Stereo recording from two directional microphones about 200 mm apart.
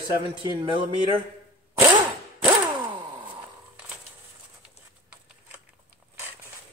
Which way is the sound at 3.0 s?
25° right (ahead or behind).